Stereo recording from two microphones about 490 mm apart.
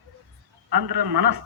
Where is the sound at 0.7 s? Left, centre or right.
Right.